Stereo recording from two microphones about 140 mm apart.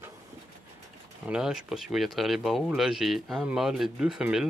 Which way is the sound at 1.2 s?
5° right (ahead or behind).